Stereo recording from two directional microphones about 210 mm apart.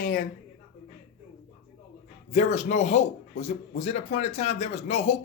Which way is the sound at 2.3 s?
35° left (ahead or behind).